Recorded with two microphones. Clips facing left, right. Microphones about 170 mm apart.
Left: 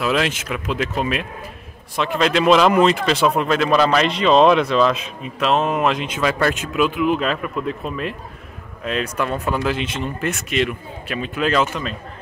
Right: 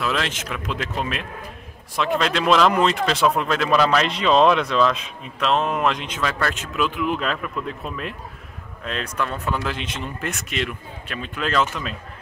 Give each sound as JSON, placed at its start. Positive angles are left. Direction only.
{"t": 0.0, "sound": "speech", "side_deg": 10}